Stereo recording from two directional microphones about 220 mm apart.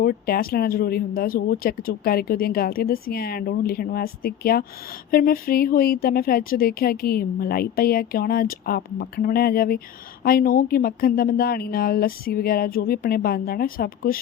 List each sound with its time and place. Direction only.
0.0 s speech: 40° left (ahead or behind)